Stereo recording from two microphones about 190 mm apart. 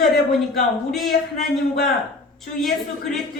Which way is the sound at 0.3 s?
Centre (ahead or behind).